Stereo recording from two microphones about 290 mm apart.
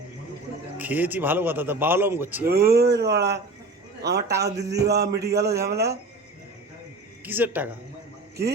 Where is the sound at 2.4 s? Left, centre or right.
Right.